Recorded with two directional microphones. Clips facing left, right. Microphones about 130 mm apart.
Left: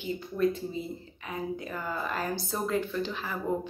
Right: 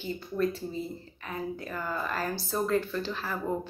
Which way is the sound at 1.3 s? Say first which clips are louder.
Left 1 dB; 20° left (ahead or behind).